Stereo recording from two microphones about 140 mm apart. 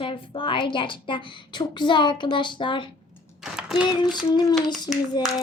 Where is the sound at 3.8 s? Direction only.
30° left (ahead or behind).